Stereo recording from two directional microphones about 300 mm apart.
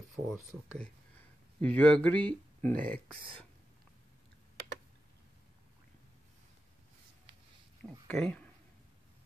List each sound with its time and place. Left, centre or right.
0.1 s speech: centre
7.8 s speech: centre